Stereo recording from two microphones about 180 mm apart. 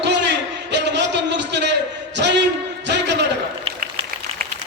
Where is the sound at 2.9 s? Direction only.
70° right (ahead or behind).